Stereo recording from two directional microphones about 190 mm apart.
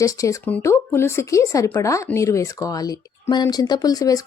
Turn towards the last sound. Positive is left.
turn(degrees=20)  # may be behind; listen again after turning